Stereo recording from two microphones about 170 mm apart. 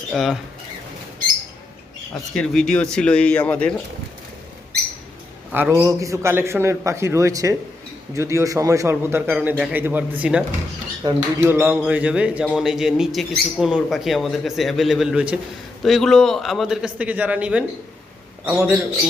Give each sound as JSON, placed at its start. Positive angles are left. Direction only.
{"t": 0.1, "sound": "speech", "side_deg": 0}
{"t": 2.3, "sound": "a man's voice", "side_deg": 5}
{"t": 5.5, "sound": "a man's voice", "side_deg": -10}